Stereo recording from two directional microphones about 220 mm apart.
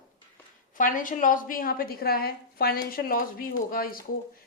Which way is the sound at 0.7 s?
35° left (ahead or behind).